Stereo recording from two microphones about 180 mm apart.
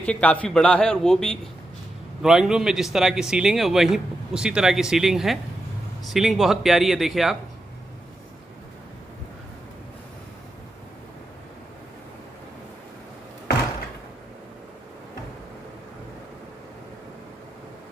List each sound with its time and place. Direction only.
0.0 s speech: 5° left (ahead or behind)